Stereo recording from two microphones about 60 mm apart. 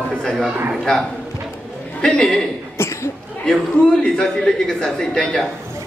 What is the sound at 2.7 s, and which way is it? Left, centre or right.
Cough, left.